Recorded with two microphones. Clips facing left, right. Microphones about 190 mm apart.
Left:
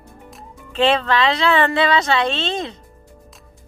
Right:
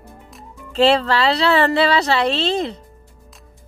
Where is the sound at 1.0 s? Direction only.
35° right (ahead or behind).